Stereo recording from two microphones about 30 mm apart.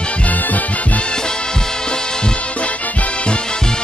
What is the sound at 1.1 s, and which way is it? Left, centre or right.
Music, left.